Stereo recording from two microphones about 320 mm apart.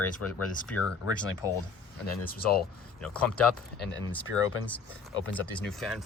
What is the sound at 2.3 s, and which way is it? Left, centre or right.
Speech, left.